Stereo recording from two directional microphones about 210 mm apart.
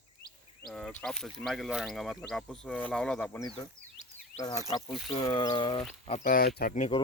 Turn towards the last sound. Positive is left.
turn(degrees=40)  # may be behind; listen again after turning